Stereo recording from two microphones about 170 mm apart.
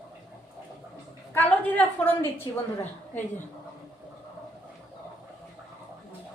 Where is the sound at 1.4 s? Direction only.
10° left (ahead or behind).